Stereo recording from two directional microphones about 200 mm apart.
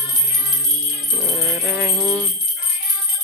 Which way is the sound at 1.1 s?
15° right (ahead or behind).